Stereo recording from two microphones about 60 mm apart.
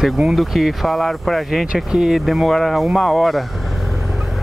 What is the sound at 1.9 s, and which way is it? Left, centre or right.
Speech, centre.